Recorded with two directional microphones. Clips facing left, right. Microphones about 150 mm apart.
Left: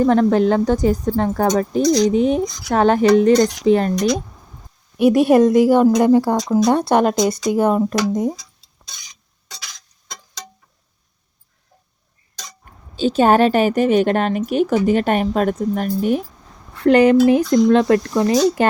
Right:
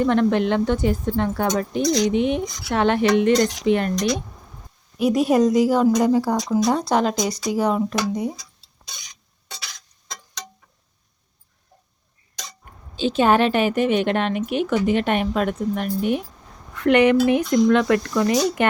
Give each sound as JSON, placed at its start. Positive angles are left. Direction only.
{"t": 0.0, "sound": "a woman's voice", "side_deg": 35}
{"t": 4.9, "sound": "a woman's voice", "side_deg": 60}
{"t": 13.0, "sound": "a woman's voice", "side_deg": 40}